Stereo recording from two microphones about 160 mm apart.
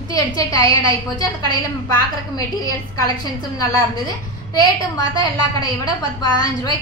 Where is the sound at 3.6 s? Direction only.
25° left (ahead or behind).